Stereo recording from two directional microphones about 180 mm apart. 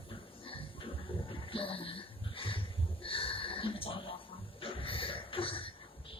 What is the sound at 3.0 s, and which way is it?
Snort, 30° left (ahead or behind).